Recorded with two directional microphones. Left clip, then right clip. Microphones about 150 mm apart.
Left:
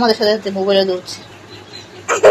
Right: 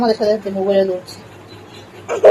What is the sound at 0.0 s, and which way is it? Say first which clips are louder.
Speech: left 1 dB; 20° left (ahead or behind).